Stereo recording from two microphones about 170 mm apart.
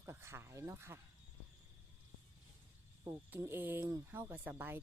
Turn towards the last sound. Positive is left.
turn(degrees=-10)  # may be behind; listen again after turning